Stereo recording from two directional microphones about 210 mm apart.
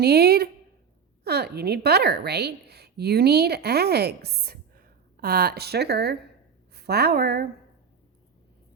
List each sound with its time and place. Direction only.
0.0 s a woman's voice: 50° right (ahead or behind)